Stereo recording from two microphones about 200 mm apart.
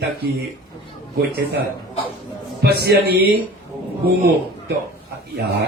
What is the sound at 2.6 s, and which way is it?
Speech, 50° right (ahead or behind).